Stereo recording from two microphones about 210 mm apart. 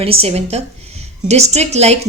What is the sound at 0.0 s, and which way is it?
A woman's voice, 25° right (ahead or behind).